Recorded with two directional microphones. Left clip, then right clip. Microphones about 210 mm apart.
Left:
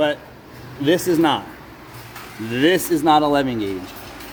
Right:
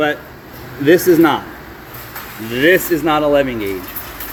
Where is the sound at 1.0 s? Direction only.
25° left (ahead or behind).